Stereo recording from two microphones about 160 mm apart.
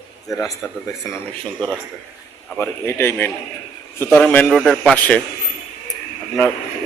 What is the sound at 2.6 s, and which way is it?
A man's voice, 15° left (ahead or behind).